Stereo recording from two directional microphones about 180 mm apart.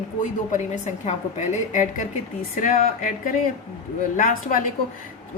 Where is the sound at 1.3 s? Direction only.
45° left (ahead or behind).